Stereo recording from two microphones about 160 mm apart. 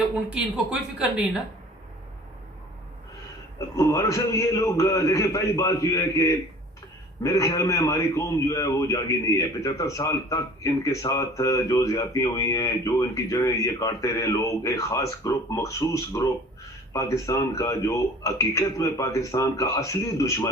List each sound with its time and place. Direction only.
0.3 s a woman's voice: 5° right (ahead or behind)
3.8 s a man's voice: 20° left (ahead or behind)